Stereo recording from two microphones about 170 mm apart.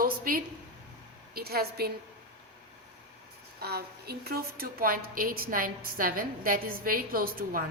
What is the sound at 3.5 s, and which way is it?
A woman's voice, 70° right (ahead or behind).